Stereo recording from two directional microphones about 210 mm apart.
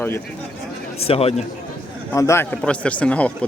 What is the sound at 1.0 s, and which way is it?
Speech, 30° left (ahead or behind).